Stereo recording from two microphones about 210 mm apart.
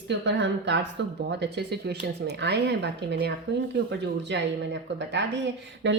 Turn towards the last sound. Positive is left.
turn(degrees=-60)  # may be behind; listen again after turning